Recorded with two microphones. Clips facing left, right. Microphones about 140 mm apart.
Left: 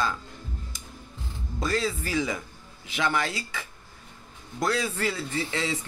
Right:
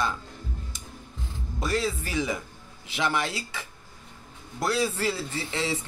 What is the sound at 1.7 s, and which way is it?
Speech, 25° right (ahead or behind).